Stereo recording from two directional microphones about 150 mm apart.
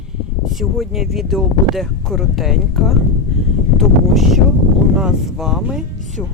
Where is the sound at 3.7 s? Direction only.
Centre (ahead or behind).